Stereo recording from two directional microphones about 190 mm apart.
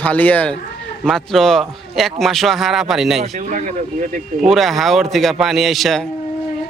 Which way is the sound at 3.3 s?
40° right (ahead or behind).